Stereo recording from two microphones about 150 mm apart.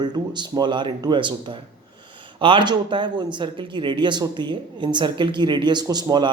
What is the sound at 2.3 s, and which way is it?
Speech, 35° right (ahead or behind).